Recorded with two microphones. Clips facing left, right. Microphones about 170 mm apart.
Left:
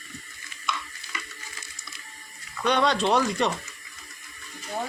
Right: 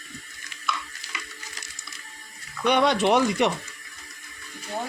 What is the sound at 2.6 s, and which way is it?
Speech, 15° right (ahead or behind).